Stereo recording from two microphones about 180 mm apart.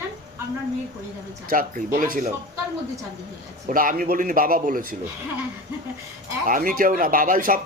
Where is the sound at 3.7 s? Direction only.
50° right (ahead or behind).